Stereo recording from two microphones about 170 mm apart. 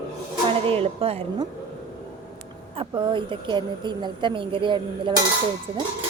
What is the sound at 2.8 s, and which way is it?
A woman's voice, 30° right (ahead or behind).